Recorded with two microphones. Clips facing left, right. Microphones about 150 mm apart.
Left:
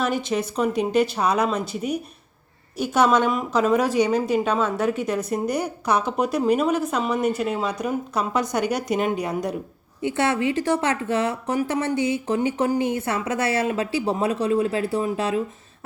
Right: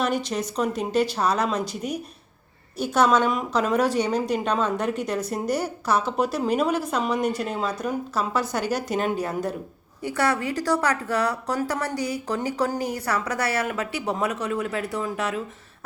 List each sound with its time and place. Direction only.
0.3 s a woman's voice: 10° left (ahead or behind); by 15.4 s 25° left (ahead or behind)